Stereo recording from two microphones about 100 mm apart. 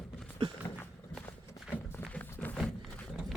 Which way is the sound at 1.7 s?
15° left (ahead or behind).